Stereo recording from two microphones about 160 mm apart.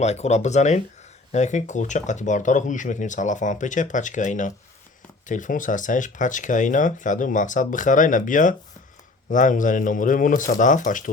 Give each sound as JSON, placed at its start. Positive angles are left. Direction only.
{"t": 0.0, "sound": "speech", "side_deg": 45}